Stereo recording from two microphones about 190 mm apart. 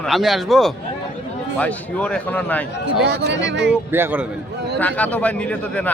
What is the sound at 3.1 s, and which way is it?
Speech, 65° right (ahead or behind).